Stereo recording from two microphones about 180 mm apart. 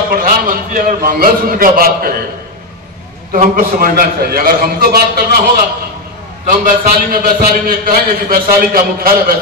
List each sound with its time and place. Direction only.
0.1 s a man's voice: 50° right (ahead or behind)
3.3 s a man's voice: 50° right (ahead or behind)
6.6 s a man's voice: 55° right (ahead or behind)